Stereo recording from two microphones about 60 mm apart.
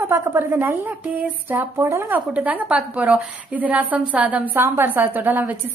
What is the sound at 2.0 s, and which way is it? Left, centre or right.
A woman's voice, right.